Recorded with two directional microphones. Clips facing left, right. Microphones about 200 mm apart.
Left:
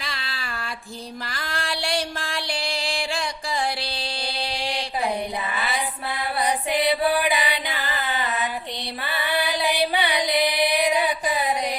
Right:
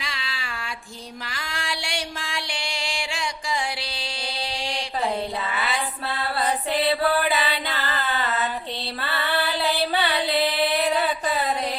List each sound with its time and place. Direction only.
0.0 s a sound: 35° left (ahead or behind)
1.3 s music: 35° left (ahead or behind)
6.4 s music: 15° left (ahead or behind)
9.0 s female singing: 15° left (ahead or behind)